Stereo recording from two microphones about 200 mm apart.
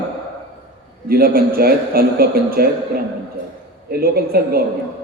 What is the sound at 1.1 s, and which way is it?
A woman's voice, 50° right (ahead or behind).